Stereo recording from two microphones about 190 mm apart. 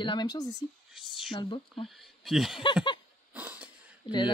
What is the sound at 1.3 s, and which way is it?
Speech, 25° left (ahead or behind).